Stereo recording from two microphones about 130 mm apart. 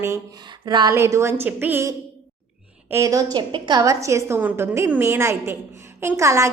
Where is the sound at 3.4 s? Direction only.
40° right (ahead or behind).